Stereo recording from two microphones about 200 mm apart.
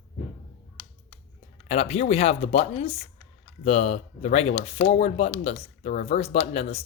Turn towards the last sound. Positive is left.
turn(degrees=30)  # may be behind; listen again after turning